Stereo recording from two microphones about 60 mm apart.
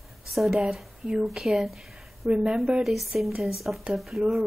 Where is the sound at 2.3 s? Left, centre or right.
Centre.